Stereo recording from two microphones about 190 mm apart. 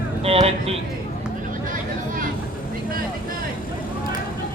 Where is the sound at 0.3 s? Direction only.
30° right (ahead or behind).